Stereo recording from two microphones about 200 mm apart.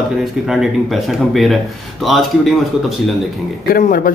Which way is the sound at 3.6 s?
45° left (ahead or behind).